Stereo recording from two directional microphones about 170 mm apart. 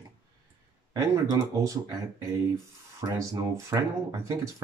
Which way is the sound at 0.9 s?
20° right (ahead or behind).